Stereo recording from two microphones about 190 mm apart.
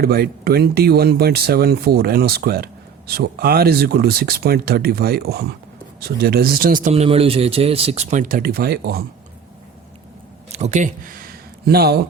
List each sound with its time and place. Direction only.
0.0 s speech: 55° right (ahead or behind)
6.9 s speech: 30° right (ahead or behind); by 9.0 s 55° right (ahead or behind)
10.5 s a sound: 35° right (ahead or behind); by 11.9 s 55° right (ahead or behind)